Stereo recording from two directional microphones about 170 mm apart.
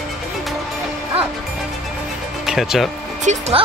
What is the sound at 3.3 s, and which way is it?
Speech, 40° right (ahead or behind).